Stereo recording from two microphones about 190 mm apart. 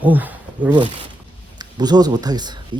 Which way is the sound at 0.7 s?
25° right (ahead or behind).